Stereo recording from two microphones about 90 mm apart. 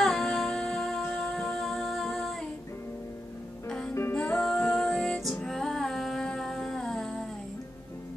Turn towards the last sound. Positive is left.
turn(degrees=5)  # may be behind; listen again after turning